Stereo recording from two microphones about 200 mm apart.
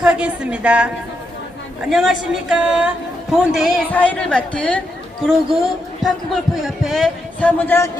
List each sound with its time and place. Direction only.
0.0 s speech: 5° right (ahead or behind)
1.9 s speech: centre (ahead or behind)